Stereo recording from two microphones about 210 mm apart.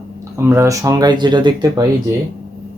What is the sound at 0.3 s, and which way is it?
Speech, 10° right (ahead or behind).